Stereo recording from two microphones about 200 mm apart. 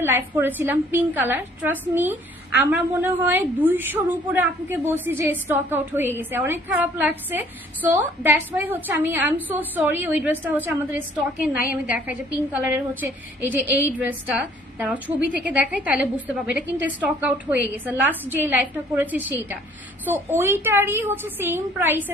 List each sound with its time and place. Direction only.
0.0 s a woman's voice: 10° right (ahead or behind)